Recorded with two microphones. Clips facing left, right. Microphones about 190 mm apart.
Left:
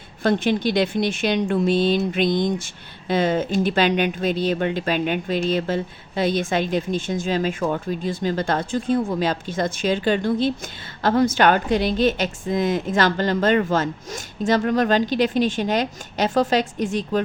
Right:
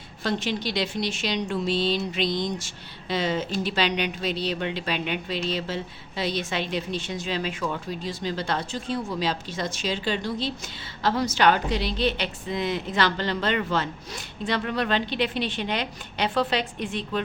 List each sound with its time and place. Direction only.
0.2 s speech: 55° left (ahead or behind)